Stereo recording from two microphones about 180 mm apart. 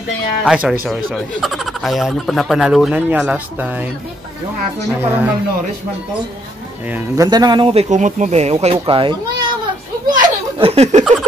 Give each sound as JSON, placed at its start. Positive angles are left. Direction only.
{"t": 0.4, "sound": "speech", "side_deg": -5}
{"t": 4.8, "sound": "a woman's voice", "side_deg": -10}
{"t": 7.2, "sound": "speech", "side_deg": -20}
{"t": 7.9, "sound": "a child's voice", "side_deg": -40}
{"t": 10.1, "sound": "a sound", "side_deg": -30}